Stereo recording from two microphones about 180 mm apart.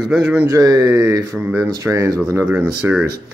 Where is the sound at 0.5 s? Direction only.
20° right (ahead or behind).